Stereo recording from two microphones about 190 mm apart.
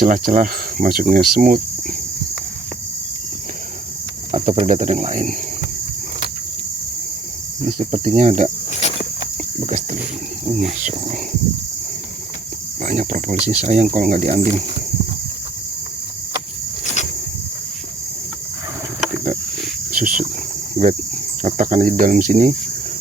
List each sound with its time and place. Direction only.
0.0 s cricket: 45° right (ahead or behind)
4.3 s cricket: 30° right (ahead or behind)
7.8 s speech: 40° right (ahead or behind)
9.6 s speech: 40° right (ahead or behind)
12.8 s speech: 40° right (ahead or behind)
16.8 s cricket: 40° left (ahead or behind)
19.9 s cricket: 45° right (ahead or behind)
21.4 s cricket: 40° right (ahead or behind)